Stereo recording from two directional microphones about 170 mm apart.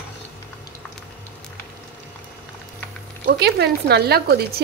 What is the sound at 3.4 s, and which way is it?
Speech, 70° right (ahead or behind).